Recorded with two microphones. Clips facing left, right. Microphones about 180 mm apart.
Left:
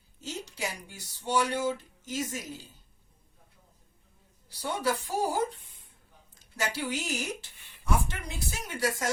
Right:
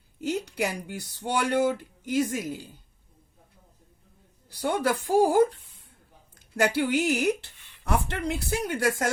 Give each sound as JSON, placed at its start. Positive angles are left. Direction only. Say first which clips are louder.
{"t": 0.2, "sound": "speech", "louder": "right 9 dB", "side_deg": -60}
{"t": 4.5, "sound": "a woman's voice", "louder": "right 5 dB", "side_deg": -60}
{"t": 6.6, "sound": "a woman's voice", "louder": "right 9 dB", "side_deg": -60}